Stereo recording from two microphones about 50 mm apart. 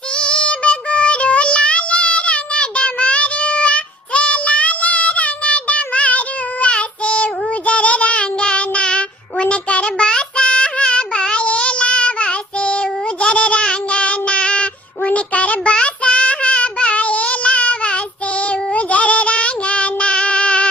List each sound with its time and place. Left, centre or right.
0.2 s child singing: left